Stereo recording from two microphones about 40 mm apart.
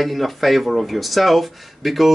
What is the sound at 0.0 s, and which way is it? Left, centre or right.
Speech, centre.